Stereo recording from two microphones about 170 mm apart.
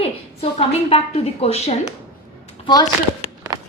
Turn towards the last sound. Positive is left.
turn(degrees=-25)  # may be behind; listen again after turning